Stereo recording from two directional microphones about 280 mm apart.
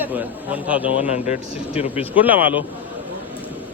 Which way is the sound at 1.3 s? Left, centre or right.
Left.